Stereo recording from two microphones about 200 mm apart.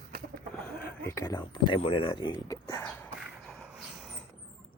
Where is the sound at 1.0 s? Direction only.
15° left (ahead or behind).